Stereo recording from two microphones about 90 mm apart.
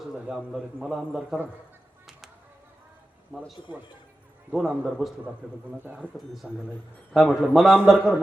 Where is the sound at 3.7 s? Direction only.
60° left (ahead or behind).